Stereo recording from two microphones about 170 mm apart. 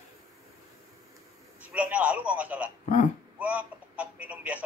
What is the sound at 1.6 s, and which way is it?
A man's voice, 10° right (ahead or behind).